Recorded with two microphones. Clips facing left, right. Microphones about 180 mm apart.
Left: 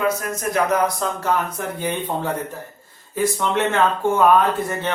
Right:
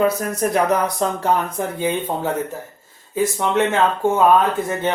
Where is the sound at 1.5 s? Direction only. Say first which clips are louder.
Right 3 dB; 15° right (ahead or behind).